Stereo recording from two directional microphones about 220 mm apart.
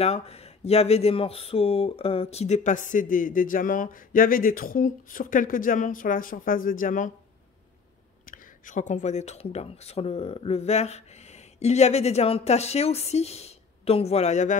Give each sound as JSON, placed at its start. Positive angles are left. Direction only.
{"t": 0.0, "sound": "speech", "side_deg": 30}
{"t": 8.3, "sound": "speech", "side_deg": 40}